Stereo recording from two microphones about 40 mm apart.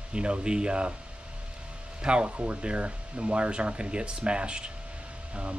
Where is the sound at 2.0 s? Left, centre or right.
Right.